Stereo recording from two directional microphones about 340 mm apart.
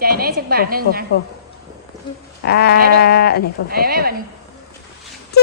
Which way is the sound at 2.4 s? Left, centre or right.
Left.